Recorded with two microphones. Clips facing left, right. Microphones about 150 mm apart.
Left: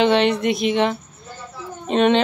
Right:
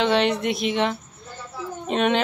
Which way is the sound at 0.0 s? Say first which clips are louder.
Left 4 dB; centre (ahead or behind).